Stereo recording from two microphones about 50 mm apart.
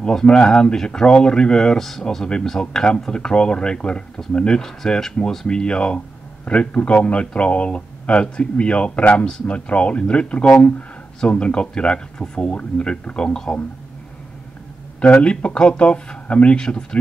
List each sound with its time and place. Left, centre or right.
0.0 s speech: centre
5.5 s speech: centre
15.2 s speech: left